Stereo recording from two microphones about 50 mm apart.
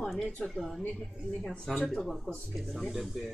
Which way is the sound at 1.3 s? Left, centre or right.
Centre.